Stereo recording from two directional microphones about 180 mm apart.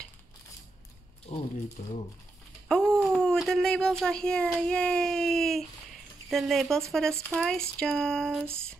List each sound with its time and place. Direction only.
1.3 s speech: 30° left (ahead or behind)
1.8 s speech: 50° left (ahead or behind)
2.7 s a child's voice: 5° left (ahead or behind)